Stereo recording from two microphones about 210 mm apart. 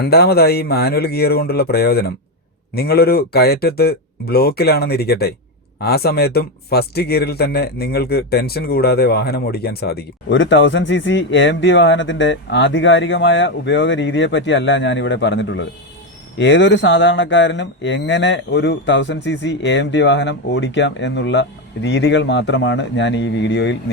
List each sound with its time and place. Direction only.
0.0 s a man's voice: 50° left (ahead or behind)